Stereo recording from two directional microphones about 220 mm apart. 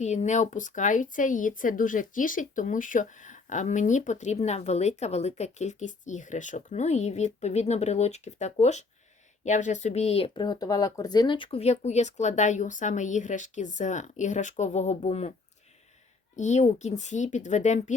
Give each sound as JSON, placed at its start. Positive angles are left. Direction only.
{"t": 0.0, "sound": "speech", "side_deg": 30}